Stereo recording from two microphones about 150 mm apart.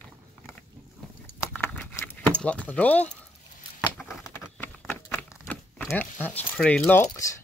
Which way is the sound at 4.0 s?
Centre (ahead or behind).